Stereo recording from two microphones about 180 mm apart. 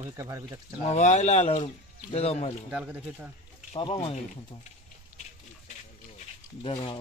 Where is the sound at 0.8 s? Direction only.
40° left (ahead or behind).